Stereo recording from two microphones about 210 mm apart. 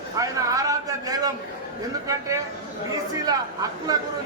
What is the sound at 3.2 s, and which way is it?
Speech, 20° right (ahead or behind).